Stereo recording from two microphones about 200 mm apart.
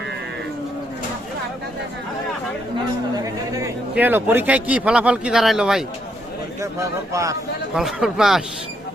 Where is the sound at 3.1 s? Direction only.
15° right (ahead or behind).